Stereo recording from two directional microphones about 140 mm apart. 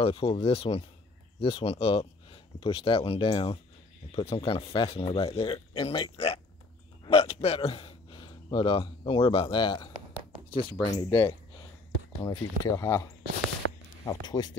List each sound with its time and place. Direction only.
0.0 s speech: 45° left (ahead or behind)
12.7 s speech: 20° left (ahead or behind)